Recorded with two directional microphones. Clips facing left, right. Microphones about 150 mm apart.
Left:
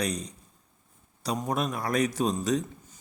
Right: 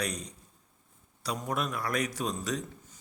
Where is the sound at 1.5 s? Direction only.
20° left (ahead or behind).